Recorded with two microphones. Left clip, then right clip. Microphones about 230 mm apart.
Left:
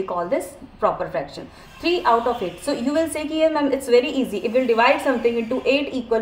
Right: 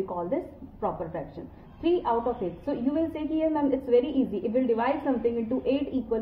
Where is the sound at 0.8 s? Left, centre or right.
Left.